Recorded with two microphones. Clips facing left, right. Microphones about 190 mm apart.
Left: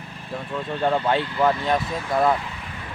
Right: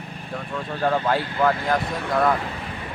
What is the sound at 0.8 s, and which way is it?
Speech, 20° left (ahead or behind).